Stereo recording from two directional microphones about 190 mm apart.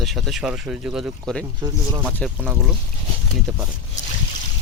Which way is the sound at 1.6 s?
20° right (ahead or behind).